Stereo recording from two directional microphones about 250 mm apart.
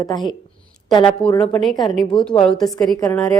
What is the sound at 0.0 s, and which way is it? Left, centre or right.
Speech, centre.